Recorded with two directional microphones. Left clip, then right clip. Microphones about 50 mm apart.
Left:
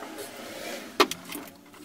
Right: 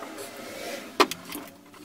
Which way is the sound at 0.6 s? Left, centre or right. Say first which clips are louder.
Right 1 dB; right.